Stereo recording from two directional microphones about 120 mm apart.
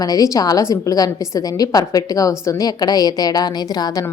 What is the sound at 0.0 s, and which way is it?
A woman's voice, 30° left (ahead or behind).